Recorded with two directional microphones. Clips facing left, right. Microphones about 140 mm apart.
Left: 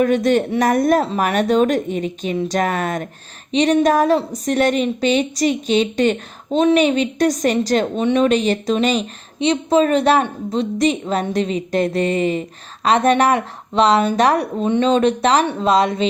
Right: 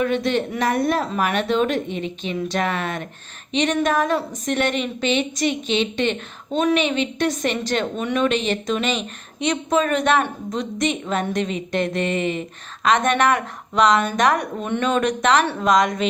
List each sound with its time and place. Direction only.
0.0 s a woman's voice: 45° left (ahead or behind)